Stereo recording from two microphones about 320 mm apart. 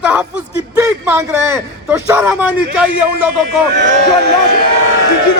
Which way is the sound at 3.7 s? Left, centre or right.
Right.